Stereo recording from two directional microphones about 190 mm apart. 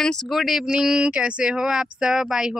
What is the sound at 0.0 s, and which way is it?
Speech, 5° left (ahead or behind).